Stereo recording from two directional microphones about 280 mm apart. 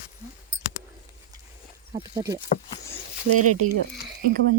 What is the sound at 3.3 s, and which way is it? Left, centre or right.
Speech, right.